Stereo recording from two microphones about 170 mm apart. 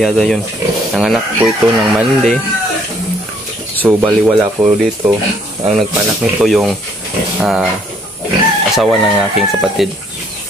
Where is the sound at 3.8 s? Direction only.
5° right (ahead or behind).